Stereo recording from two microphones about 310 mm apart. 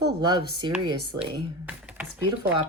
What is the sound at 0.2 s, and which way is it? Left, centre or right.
Speech, centre.